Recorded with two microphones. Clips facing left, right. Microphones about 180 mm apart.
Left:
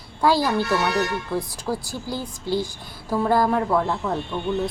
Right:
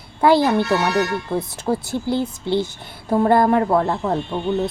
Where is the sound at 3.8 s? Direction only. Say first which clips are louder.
Right 4 dB; 40° right (ahead or behind).